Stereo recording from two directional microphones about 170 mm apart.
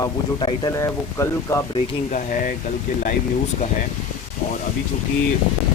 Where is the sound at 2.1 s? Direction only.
50° left (ahead or behind).